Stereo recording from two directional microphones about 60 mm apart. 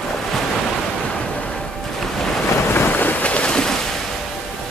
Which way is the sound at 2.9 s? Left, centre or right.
Left.